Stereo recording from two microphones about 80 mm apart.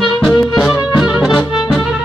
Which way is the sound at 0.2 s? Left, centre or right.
Centre.